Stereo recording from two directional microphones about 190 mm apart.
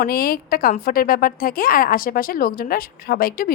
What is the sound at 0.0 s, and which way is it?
A woman's voice, 50° left (ahead or behind).